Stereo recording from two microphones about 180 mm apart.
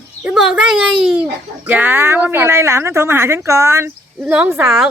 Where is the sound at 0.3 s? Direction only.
5° right (ahead or behind).